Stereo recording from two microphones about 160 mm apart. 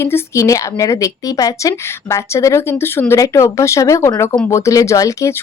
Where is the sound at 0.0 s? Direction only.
20° left (ahead or behind).